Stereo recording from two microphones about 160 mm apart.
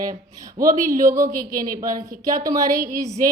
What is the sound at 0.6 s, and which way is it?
Speech, 55° right (ahead or behind).